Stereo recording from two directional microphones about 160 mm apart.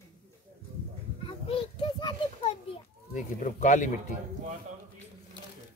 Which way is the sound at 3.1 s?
50° left (ahead or behind).